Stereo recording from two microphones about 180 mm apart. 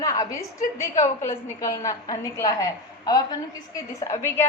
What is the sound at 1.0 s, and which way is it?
A woman's voice, 20° left (ahead or behind).